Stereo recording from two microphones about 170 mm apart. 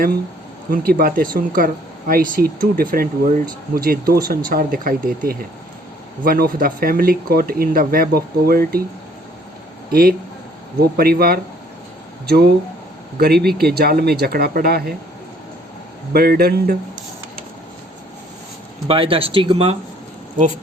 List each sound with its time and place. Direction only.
0.7 s speech: 60° right (ahead or behind)
9.9 s speech: 60° right (ahead or behind)
16.1 s speech: 65° right (ahead or behind)
18.9 s speech: 30° right (ahead or behind)